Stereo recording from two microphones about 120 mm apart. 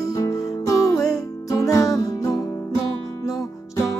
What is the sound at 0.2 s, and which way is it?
Music, 25° left (ahead or behind).